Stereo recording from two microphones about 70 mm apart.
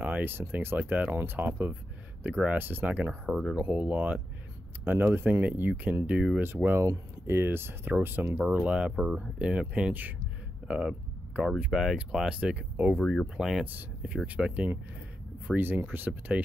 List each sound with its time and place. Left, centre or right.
0.0 s speech: right
3.3 s speech: centre
3.5 s speech: right
4.8 s speech: right
6.4 s speech: right
10.7 s speech: centre
12.4 s speech: centre
13.0 s speech: centre
13.4 s speech: centre
13.7 s speech: right